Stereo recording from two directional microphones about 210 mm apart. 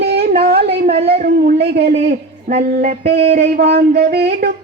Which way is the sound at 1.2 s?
45° right (ahead or behind).